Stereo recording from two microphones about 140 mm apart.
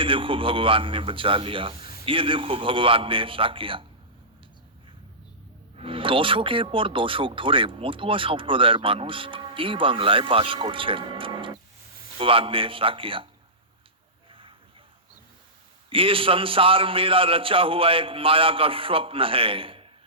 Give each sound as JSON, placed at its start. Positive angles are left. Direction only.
{"t": 0.0, "sound": "speech", "side_deg": -40}
{"t": 5.7, "sound": "speech", "side_deg": -40}
{"t": 15.9, "sound": "speech", "side_deg": -40}